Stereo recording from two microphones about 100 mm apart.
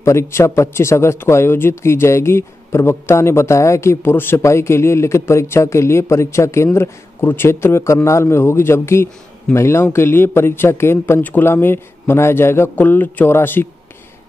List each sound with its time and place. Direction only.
0.0 s speech: 30° left (ahead or behind)